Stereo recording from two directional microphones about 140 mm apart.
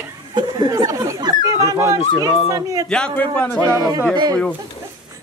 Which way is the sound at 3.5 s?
30° right (ahead or behind).